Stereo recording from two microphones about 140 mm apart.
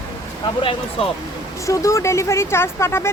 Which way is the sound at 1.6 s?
20° left (ahead or behind).